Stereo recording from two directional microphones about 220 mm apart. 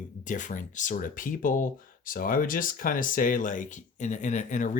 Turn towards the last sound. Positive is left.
turn(degrees=35)  # may be behind; listen again after turning